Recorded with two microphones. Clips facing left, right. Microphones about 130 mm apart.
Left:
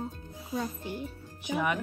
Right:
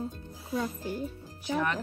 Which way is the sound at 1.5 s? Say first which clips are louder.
Even; 10° left (ahead or behind).